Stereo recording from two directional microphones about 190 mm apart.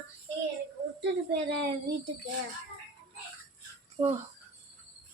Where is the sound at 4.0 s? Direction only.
30° right (ahead or behind).